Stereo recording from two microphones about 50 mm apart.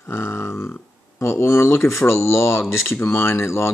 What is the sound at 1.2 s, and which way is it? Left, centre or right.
Speech, left.